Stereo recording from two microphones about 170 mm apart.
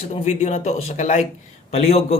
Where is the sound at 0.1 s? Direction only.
45° left (ahead or behind).